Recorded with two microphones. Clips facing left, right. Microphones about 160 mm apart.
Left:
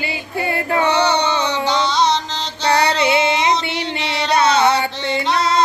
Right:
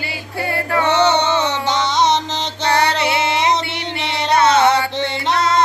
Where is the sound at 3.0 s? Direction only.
20° left (ahead or behind).